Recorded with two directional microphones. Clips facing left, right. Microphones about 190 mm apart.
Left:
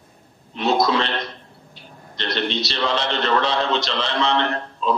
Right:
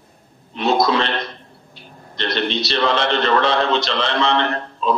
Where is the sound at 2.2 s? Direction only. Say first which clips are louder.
Right 2 dB; 60° right (ahead or behind).